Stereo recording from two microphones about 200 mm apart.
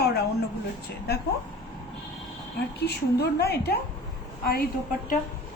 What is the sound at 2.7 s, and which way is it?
A woman's voice, 55° left (ahead or behind).